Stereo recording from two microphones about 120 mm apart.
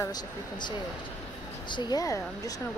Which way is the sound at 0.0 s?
35° left (ahead or behind).